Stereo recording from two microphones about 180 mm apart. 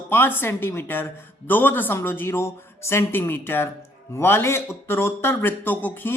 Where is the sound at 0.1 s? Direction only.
10° left (ahead or behind).